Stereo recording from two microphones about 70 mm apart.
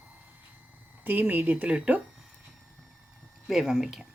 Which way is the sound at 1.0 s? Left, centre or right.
Right.